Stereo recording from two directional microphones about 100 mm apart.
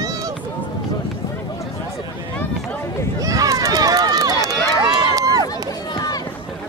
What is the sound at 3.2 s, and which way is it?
Run, 35° right (ahead or behind).